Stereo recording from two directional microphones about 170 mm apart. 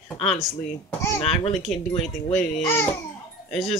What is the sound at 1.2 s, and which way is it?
Speech, 35° left (ahead or behind).